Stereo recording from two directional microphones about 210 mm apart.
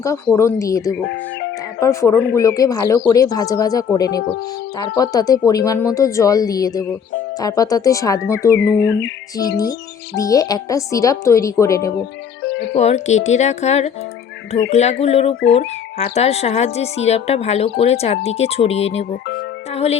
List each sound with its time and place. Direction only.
0.3 s speech: 15° left (ahead or behind)
8.8 s music: 55° left (ahead or behind)
9.4 s speech: 15° left (ahead or behind)
12.7 s speech: 30° left (ahead or behind)